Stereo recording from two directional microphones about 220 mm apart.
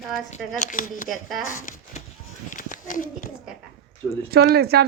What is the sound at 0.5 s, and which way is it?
Speech, 35° left (ahead or behind).